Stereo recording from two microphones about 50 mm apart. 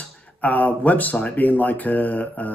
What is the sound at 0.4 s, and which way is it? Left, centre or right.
Speech, left.